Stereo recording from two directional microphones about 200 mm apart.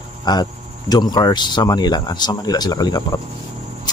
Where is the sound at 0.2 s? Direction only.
20° left (ahead or behind).